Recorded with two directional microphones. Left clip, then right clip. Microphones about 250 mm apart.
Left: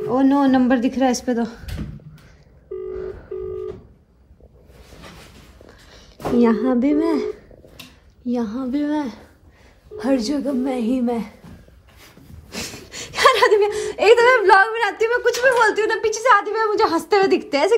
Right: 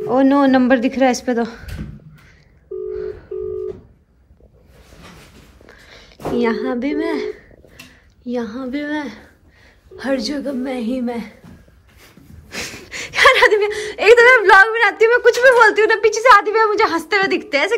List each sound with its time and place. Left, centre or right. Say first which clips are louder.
0.0 s a woman's voice: right 3 dB; centre
5.7 s a woman's voice: right 8 dB; centre
12.4 s a sound: right 3 dB; centre
15.4 s a woman's voice: right 5 dB; centre